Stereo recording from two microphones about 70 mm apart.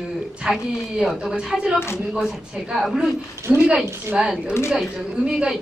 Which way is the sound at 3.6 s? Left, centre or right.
Centre.